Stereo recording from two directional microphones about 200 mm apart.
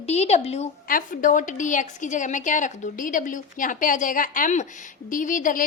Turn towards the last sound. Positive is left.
turn(degrees=40)  # may be behind; listen again after turning